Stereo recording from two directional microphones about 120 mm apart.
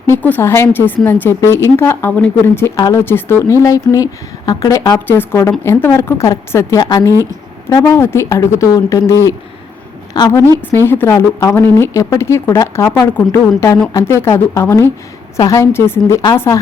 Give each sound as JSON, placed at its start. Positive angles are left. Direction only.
{"t": 0.1, "sound": "speech", "side_deg": 15}
{"t": 5.0, "sound": "speech", "side_deg": 20}
{"t": 10.7, "sound": "speech", "side_deg": 20}